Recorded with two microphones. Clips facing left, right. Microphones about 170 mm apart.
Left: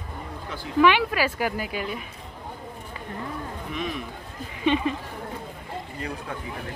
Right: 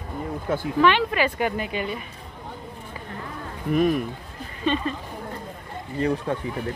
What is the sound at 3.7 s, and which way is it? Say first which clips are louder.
Speech: right 12 dB; 50° right (ahead or behind).